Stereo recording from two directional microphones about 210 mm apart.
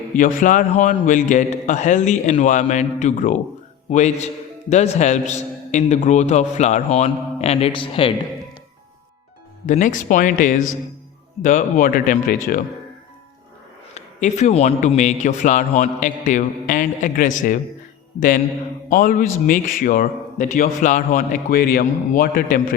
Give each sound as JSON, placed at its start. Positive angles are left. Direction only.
{"t": 0.2, "sound": "a man's voice", "side_deg": 40}
{"t": 9.6, "sound": "a man's voice", "side_deg": 35}
{"t": 13.9, "sound": "a man's voice", "side_deg": 35}
{"t": 18.9, "sound": "a man's voice", "side_deg": 40}